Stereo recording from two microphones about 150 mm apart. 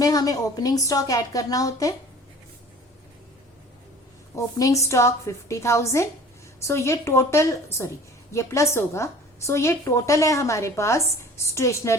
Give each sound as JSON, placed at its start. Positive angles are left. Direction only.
{"t": 0.0, "sound": "a woman's voice", "side_deg": 25}
{"t": 4.4, "sound": "a woman's voice", "side_deg": 20}